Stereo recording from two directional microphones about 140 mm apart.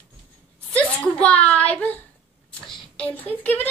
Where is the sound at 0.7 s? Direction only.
10° left (ahead or behind).